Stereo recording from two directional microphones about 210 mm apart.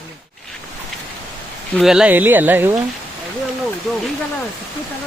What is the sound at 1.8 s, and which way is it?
Speech, 5° right (ahead or behind).